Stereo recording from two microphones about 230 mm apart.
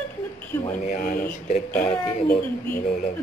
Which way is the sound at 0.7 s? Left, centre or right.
Left.